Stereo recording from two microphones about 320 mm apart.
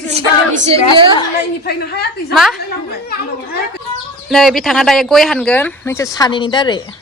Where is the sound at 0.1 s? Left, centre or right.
Centre.